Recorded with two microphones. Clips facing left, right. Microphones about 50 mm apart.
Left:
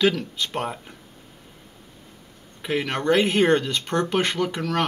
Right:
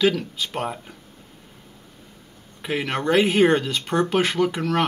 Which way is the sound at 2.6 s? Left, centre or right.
Centre.